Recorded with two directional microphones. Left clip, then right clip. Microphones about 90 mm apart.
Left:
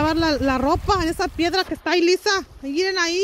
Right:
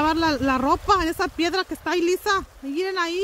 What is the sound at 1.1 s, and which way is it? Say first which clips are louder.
Speech: left 2 dB; 25° right (ahead or behind).